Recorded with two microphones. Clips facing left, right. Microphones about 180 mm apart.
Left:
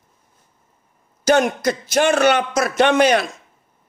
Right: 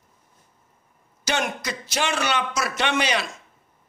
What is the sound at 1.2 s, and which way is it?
A man's voice, 45° left (ahead or behind).